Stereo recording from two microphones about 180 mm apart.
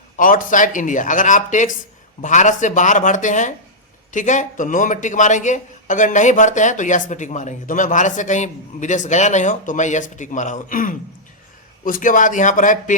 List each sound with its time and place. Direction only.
0.2 s speech: 50° left (ahead or behind)